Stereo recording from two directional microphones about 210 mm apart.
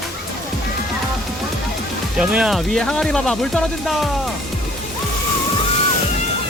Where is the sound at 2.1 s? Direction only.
5° right (ahead or behind).